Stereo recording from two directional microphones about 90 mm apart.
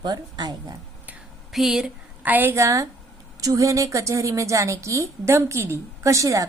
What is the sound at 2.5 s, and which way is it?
A woman's voice, 35° right (ahead or behind).